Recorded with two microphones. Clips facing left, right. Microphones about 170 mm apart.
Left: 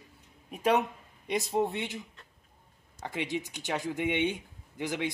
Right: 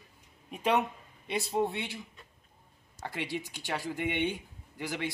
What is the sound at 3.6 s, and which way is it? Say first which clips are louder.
Speech: left 2 dB; 5° right (ahead or behind).